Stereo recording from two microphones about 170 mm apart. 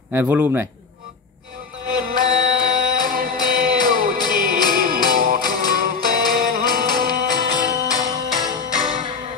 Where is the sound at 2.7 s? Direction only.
55° right (ahead or behind).